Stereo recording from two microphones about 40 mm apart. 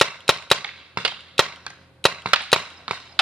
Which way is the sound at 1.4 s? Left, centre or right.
Centre.